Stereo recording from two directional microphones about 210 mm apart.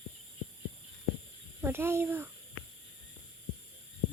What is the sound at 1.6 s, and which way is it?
Speech, 10° right (ahead or behind).